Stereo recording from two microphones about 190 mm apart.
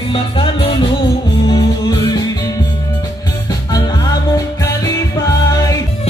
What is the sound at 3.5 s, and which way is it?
Music, 20° left (ahead or behind).